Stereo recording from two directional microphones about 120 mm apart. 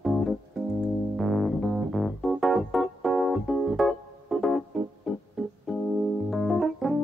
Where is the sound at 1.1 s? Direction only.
Centre (ahead or behind).